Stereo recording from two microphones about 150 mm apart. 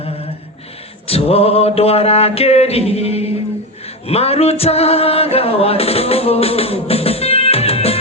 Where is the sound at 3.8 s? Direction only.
45° left (ahead or behind).